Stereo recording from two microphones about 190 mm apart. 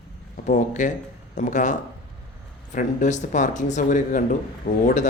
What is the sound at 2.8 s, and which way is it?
A man's voice, 40° left (ahead or behind).